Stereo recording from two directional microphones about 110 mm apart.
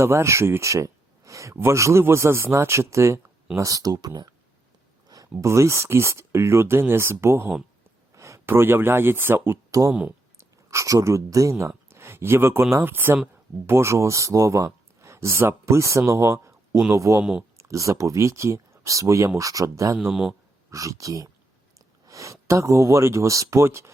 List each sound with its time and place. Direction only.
0.0 s speech: 25° right (ahead or behind)
9.9 s speech: 10° right (ahead or behind)
10.3 s speech: 25° right (ahead or behind)
11.9 s a sound: 20° right (ahead or behind)
12.7 s speech: 20° right (ahead or behind)
20.0 s speech: 5° right (ahead or behind)
20.7 s speech: 30° right (ahead or behind)